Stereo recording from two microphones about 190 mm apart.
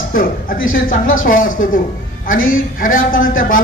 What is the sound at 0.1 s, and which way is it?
A man's voice, 50° left (ahead or behind).